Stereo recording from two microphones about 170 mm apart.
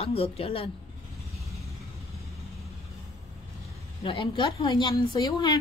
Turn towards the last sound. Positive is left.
turn(degrees=25)  # may be behind; listen again after turning